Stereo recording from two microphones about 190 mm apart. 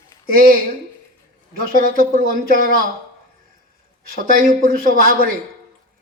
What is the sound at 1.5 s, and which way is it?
A man's voice, 50° right (ahead or behind).